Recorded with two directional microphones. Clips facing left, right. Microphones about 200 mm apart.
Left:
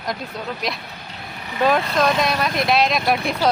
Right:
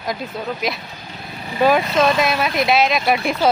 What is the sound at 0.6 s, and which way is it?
Speech, centre (ahead or behind).